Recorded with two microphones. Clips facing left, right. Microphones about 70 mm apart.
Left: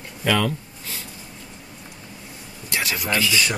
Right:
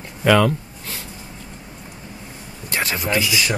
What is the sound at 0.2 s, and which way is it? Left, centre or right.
Speech, right.